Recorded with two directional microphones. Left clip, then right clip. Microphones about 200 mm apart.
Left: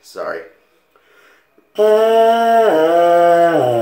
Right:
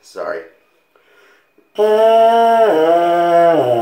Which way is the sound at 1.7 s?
5° right (ahead or behind).